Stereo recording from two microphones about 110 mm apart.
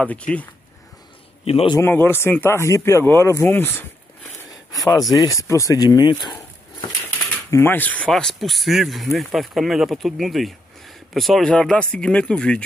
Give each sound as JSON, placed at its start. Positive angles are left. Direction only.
{"t": 0.0, "sound": "speech", "side_deg": 10}
{"t": 1.4, "sound": "a man's voice", "side_deg": 65}
{"t": 1.8, "sound": "speech", "side_deg": 20}
{"t": 5.2, "sound": "speech", "side_deg": 30}
{"t": 7.5, "sound": "speech", "side_deg": 20}
{"t": 8.1, "sound": "speech", "side_deg": 5}